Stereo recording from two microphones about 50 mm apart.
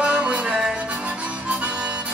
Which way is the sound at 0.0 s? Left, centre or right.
Right.